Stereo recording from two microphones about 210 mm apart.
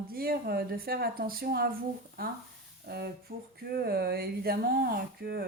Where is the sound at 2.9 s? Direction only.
50° right (ahead or behind).